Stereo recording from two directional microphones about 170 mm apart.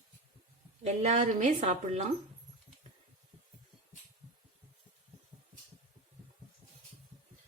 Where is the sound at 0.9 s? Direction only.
40° right (ahead or behind).